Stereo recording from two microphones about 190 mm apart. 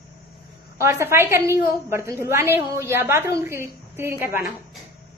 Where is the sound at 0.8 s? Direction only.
15° right (ahead or behind).